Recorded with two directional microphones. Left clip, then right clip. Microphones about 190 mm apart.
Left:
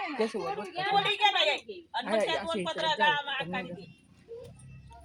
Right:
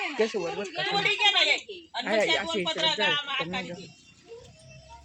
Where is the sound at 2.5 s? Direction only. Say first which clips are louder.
Right 3 dB; 30° right (ahead or behind).